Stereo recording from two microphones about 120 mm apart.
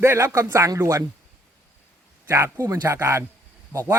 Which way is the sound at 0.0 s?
20° right (ahead or behind).